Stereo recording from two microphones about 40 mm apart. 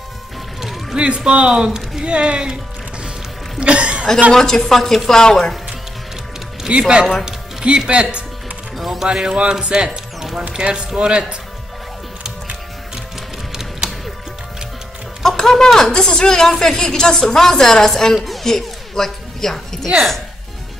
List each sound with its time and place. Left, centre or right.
0.6 s music: centre
0.9 s speech: right
4.3 s a woman's voice: centre
5.2 s a woman's voice: centre
6.8 s speech: right
8.7 s music: centre
9.0 s speech: centre
9.8 s music: centre
10.6 s speech: right
13.5 s music: centre
15.2 s a sound: centre
15.6 s a woman's voice: centre